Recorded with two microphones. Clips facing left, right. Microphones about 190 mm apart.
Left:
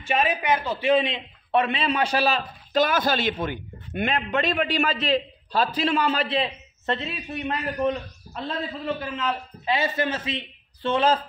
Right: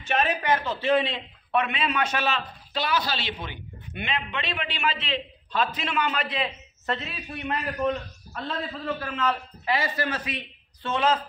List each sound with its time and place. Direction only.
0.0 s a man's voice: 10° left (ahead or behind)
1.5 s a man's voice: 30° left (ahead or behind)